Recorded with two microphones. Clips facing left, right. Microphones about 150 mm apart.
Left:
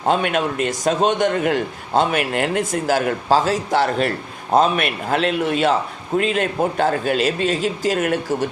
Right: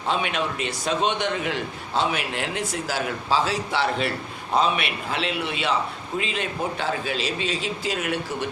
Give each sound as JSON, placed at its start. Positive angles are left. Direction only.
{"t": 0.0, "sound": "a man's voice", "side_deg": 50}